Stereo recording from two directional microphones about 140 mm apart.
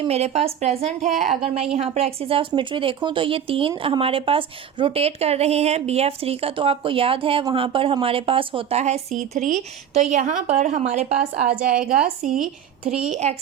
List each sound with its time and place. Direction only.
0.0 s a woman's voice: 50° right (ahead or behind)
9.1 s speech: 60° right (ahead or behind)
12.2 s speech: 70° right (ahead or behind)
13.1 s a woman's voice: 55° right (ahead or behind)